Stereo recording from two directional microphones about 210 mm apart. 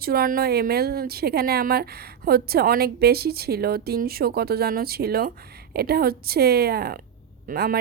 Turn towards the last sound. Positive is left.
turn(degrees=-45)  # may be behind; listen again after turning